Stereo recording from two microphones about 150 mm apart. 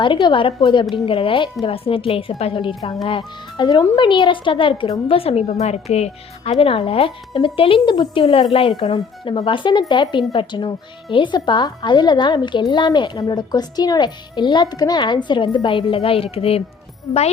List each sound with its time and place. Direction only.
0.0 s a child's voice: 30° left (ahead or behind)